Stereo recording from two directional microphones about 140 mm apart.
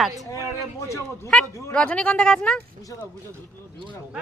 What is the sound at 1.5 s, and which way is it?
Speech, 20° left (ahead or behind).